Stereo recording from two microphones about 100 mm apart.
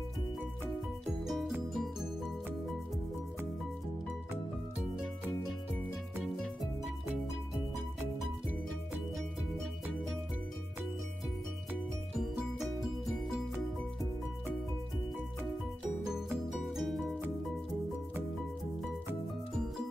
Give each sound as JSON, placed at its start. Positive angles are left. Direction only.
{"t": 1.2, "sound": "music", "side_deg": 0}
{"t": 6.2, "sound": "music", "side_deg": 0}
{"t": 16.4, "sound": "music", "side_deg": 0}